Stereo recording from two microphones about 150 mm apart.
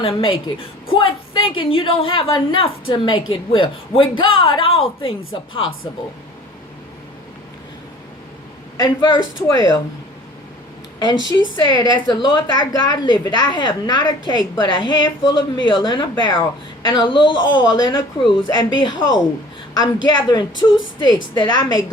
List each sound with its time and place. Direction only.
0.0 s a woman's voice: 35° left (ahead or behind)
8.8 s a woman's voice: 30° left (ahead or behind)
11.0 s a woman's voice: 30° left (ahead or behind)
20.1 s a woman's voice: 30° left (ahead or behind)